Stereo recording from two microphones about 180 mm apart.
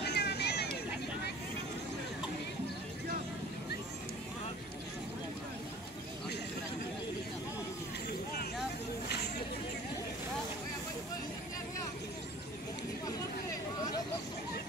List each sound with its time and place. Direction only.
0.0 s vehicle: 65° left (ahead or behind)